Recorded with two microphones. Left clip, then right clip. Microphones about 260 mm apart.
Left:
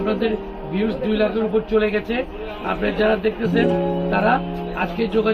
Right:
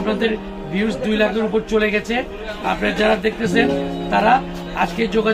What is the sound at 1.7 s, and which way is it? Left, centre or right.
Speech, centre.